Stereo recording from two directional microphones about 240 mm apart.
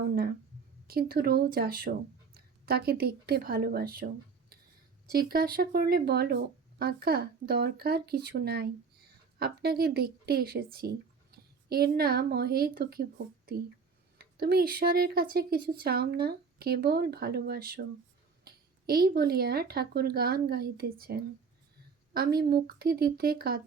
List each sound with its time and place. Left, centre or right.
0.0 s speech: right
5.0 s a woman's voice: right